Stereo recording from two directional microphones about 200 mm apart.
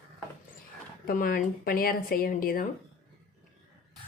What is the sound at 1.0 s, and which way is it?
Speech, 45° left (ahead or behind).